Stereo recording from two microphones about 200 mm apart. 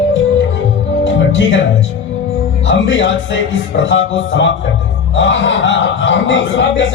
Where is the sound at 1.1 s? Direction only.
70° left (ahead or behind).